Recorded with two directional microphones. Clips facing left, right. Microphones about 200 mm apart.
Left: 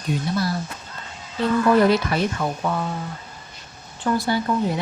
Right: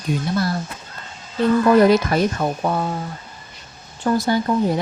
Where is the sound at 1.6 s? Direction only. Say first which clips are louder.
Right 3 dB; 45° right (ahead or behind).